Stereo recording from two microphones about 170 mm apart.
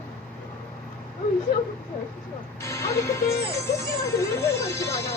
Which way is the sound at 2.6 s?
15° left (ahead or behind).